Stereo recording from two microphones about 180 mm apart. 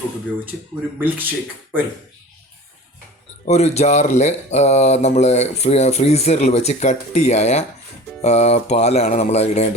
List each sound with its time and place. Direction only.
0.9 s speech: 10° right (ahead or behind)
3.4 s speech: 40° left (ahead or behind)